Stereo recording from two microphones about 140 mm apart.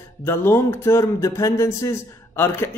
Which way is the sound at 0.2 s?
20° left (ahead or behind).